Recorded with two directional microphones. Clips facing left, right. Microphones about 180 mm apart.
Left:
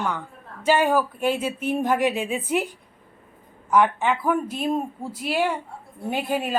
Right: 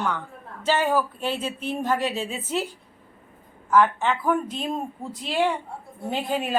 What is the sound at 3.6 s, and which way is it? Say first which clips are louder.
Speech: even; 15° left (ahead or behind).